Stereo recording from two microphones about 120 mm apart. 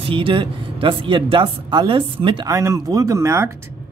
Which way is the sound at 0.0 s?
45° right (ahead or behind).